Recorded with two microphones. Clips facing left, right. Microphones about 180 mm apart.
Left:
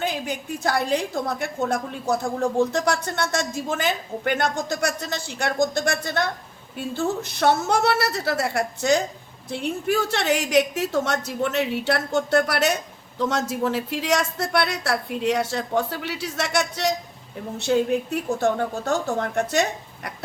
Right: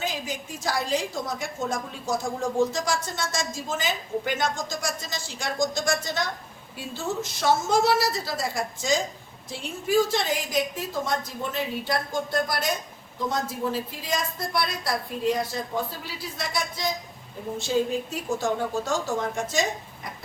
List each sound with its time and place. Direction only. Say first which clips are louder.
0.0 s a woman's voice: left 4 dB; 60° left (ahead or behind); by 16.9 s 80° left
17.6 s a woman's voice: left 4 dB; 65° left (ahead or behind)